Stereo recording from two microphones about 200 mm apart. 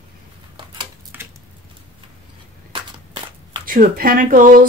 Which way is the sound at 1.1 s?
10° right (ahead or behind).